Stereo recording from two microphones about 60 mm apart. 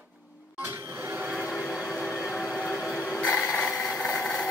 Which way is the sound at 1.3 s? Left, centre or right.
Centre.